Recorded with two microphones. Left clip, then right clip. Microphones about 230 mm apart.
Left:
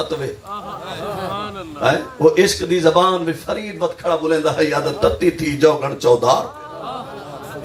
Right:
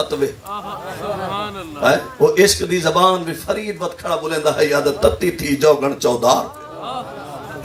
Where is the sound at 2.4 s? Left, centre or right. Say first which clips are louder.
Right 1 dB; right.